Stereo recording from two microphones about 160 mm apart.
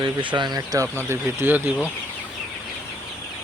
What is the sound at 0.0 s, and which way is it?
Speech, 30° right (ahead or behind).